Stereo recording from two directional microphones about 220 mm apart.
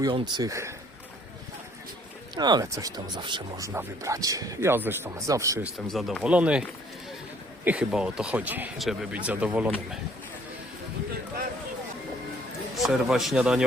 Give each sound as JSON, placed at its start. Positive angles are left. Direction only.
{"t": 0.0, "sound": "a man's voice", "side_deg": -20}
{"t": 2.3, "sound": "a man's voice", "side_deg": -20}
{"t": 12.7, "sound": "speech", "side_deg": 0}